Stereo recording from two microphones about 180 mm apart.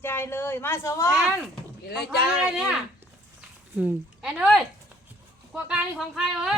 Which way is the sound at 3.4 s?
10° right (ahead or behind).